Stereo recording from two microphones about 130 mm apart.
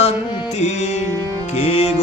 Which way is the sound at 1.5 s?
55° left (ahead or behind).